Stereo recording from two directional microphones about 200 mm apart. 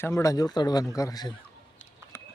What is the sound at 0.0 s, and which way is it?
Speech, 15° left (ahead or behind).